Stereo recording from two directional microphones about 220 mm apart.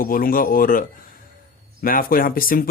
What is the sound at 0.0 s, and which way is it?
Speech, 40° left (ahead or behind).